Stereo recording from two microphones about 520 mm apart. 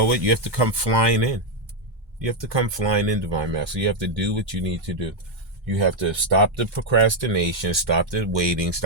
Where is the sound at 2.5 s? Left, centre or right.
Right.